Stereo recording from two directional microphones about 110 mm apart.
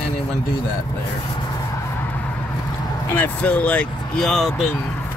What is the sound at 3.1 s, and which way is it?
Speech, 15° left (ahead or behind).